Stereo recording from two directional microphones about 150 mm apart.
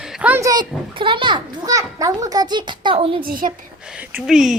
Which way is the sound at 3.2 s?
70° right (ahead or behind).